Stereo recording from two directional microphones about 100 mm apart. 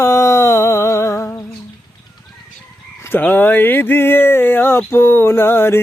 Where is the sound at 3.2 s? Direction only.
20° left (ahead or behind).